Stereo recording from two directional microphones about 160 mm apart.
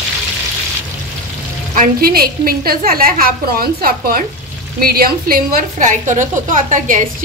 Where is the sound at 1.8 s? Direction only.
65° right (ahead or behind).